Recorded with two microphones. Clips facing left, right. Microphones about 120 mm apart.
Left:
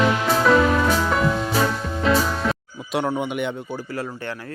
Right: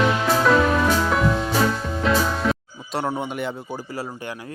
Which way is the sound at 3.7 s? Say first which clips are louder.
Left 1 dB; 20° right (ahead or behind).